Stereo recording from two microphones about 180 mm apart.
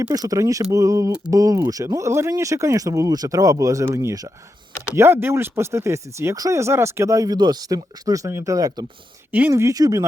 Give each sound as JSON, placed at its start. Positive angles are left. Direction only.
{"t": 0.0, "sound": "speech", "side_deg": -20}